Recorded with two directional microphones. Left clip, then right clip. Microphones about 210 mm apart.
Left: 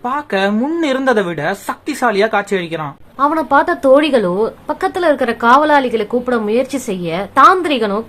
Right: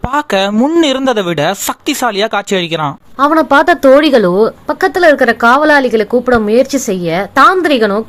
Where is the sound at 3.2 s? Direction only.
30° right (ahead or behind).